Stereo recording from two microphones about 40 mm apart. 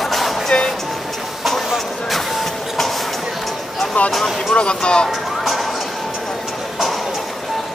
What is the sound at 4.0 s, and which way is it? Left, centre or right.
Vehicle, left.